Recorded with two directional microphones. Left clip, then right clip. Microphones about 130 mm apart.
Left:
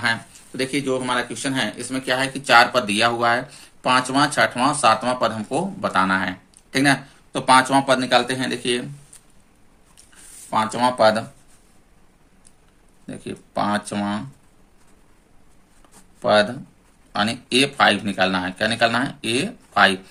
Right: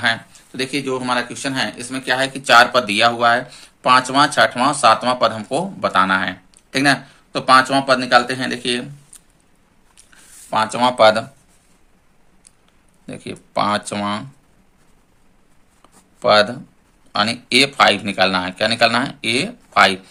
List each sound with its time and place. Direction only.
0.0 s speech: 20° right (ahead or behind)
10.5 s speech: 25° right (ahead or behind)
13.1 s speech: 25° right (ahead or behind)
16.2 s speech: 25° right (ahead or behind)